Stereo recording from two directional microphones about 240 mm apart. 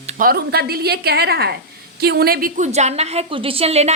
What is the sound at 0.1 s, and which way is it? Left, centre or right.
A woman's voice, right.